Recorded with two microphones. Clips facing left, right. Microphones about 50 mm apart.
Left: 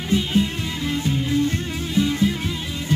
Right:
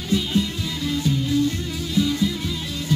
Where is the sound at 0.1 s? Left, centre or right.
Left.